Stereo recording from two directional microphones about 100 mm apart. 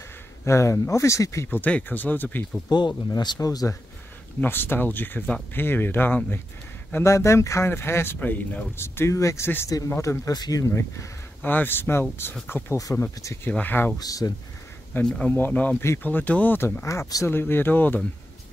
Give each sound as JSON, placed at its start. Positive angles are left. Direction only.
{"t": 0.5, "sound": "speech", "side_deg": 30}
{"t": 2.7, "sound": "speech", "side_deg": 45}
{"t": 4.4, "sound": "speech", "side_deg": 20}
{"t": 10.7, "sound": "speech", "side_deg": 25}
{"t": 12.7, "sound": "speech", "side_deg": 35}
{"t": 13.5, "sound": "speech", "side_deg": 15}
{"t": 13.9, "sound": "speech", "side_deg": 40}
{"t": 15.0, "sound": "speech", "side_deg": 5}
{"t": 15.3, "sound": "speech", "side_deg": 20}